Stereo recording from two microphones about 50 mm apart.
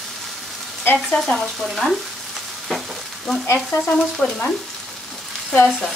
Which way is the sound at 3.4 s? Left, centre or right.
Left.